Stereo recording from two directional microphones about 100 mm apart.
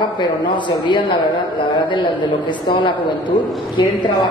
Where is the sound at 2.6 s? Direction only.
55° left (ahead or behind).